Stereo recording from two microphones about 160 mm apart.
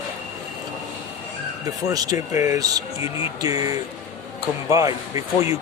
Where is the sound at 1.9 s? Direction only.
20° right (ahead or behind).